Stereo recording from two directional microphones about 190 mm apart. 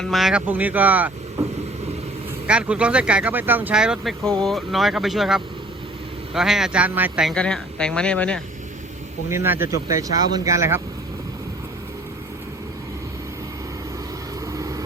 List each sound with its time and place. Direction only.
0.0 s speech: centre (ahead or behind)
2.5 s speech: 5° right (ahead or behind)
9.3 s speech: 15° right (ahead or behind)
14.4 s vehicle: 15° right (ahead or behind)